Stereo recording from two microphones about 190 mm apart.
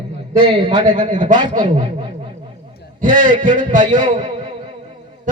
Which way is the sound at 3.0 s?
45° right (ahead or behind).